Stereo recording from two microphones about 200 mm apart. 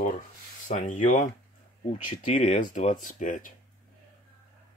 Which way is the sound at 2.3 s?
40° left (ahead or behind).